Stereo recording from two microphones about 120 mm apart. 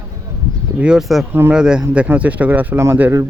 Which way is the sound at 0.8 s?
5° right (ahead or behind).